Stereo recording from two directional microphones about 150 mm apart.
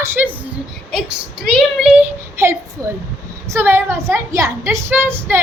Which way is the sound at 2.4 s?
20° right (ahead or behind).